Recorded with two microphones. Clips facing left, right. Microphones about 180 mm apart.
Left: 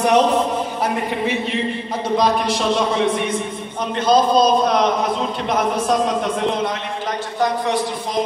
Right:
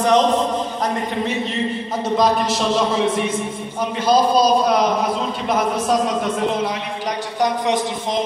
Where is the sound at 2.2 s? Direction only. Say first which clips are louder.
Right 1 dB; centre (ahead or behind).